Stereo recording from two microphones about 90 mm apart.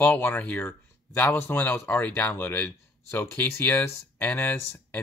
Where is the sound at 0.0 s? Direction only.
25° left (ahead or behind).